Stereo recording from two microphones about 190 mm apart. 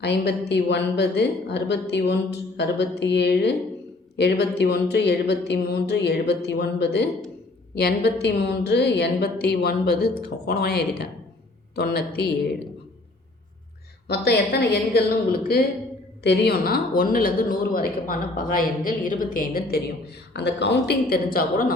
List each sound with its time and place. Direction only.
0.0 s a woman's voice: 65° left (ahead or behind)
14.1 s a woman's voice: 60° left (ahead or behind)
16.2 s a woman's voice: 65° left (ahead or behind)
20.3 s a woman's voice: 65° left (ahead or behind)